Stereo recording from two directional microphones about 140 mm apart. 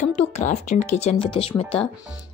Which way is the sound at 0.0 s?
55° left (ahead or behind).